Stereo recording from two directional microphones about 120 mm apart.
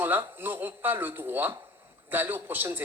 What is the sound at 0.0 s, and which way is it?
A woman's voice, 15° right (ahead or behind).